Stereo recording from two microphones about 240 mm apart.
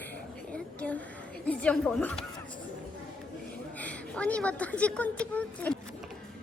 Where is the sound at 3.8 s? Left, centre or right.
Centre.